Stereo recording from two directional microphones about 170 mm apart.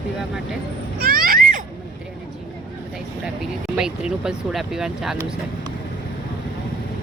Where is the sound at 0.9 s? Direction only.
60° right (ahead or behind).